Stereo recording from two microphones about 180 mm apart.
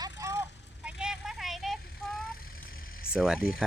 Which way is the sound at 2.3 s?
55° left (ahead or behind).